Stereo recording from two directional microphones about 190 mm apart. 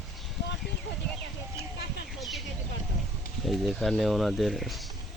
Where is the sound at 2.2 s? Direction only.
Centre (ahead or behind).